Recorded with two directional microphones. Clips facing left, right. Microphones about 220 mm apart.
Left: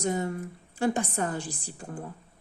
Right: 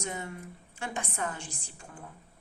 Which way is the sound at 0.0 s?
40° left (ahead or behind).